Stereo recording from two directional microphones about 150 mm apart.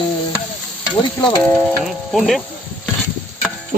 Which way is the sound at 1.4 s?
5° left (ahead or behind).